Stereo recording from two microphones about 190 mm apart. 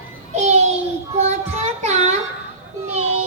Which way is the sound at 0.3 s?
35° right (ahead or behind).